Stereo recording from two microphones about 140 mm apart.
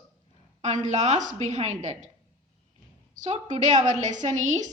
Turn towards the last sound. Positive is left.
turn(degrees=-60)  # may be behind; listen again after turning